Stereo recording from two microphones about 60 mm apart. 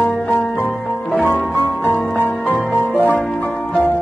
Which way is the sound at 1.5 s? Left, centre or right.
Left.